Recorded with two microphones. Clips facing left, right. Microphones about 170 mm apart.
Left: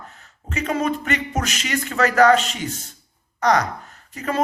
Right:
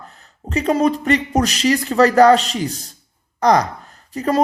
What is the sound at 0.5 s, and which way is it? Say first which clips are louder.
Speech: right 6 dB; 35° right (ahead or behind).